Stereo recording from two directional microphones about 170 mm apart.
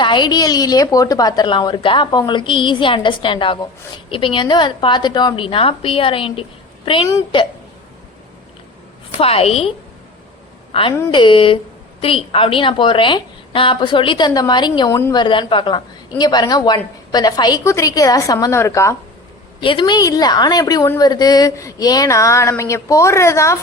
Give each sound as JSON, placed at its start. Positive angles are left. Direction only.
{"t": 0.0, "sound": "a woman's voice", "side_deg": 25}
{"t": 9.2, "sound": "a woman's voice", "side_deg": 35}
{"t": 15.2, "sound": "a woman's voice", "side_deg": 30}
{"t": 19.5, "sound": "a woman's voice", "side_deg": 30}